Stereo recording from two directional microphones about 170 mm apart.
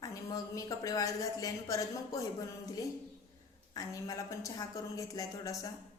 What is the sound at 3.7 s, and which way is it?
A woman's voice, 20° left (ahead or behind).